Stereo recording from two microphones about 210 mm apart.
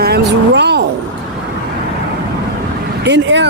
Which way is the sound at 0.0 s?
50° right (ahead or behind).